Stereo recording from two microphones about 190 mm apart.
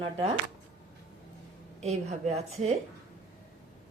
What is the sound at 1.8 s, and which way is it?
Speech, 35° right (ahead or behind).